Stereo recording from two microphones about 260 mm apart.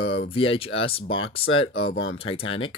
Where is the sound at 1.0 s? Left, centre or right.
Left.